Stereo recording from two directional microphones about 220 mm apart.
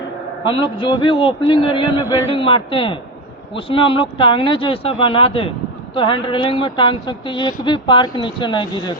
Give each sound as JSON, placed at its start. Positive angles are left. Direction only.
{"t": 0.4, "sound": "speech", "side_deg": 25}